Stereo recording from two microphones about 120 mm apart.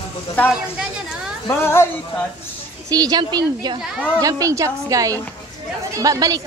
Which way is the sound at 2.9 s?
35° right (ahead or behind).